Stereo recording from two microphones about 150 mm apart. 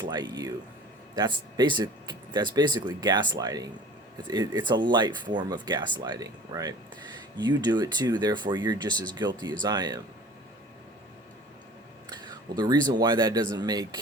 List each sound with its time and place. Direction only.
0.0 s speech: 30° right (ahead or behind)
12.0 s speech: 30° right (ahead or behind)